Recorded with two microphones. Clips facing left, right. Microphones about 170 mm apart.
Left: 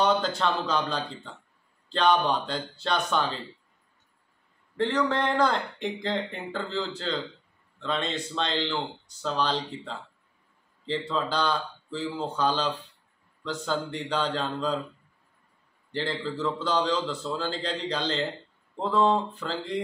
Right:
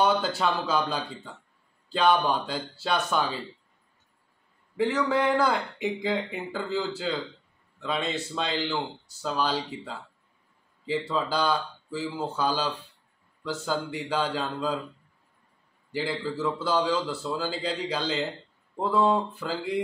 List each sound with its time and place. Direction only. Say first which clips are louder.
0.0 s speech: even; 10° right (ahead or behind)
4.7 s speech: right 1 dB; 10° right (ahead or behind)
15.9 s speech: right 1 dB; 10° right (ahead or behind)